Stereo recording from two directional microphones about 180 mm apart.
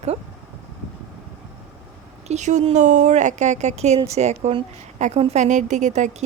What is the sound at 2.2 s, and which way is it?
A woman's voice, 40° right (ahead or behind).